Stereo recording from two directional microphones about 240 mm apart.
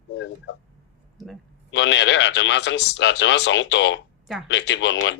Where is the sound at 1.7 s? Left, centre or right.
Left.